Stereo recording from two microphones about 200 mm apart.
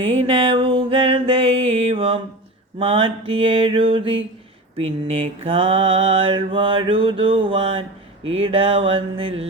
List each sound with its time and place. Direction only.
0.0 s mantra: 30° right (ahead or behind)